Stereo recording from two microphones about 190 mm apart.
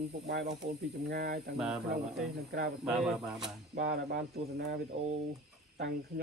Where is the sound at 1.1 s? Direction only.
55° right (ahead or behind).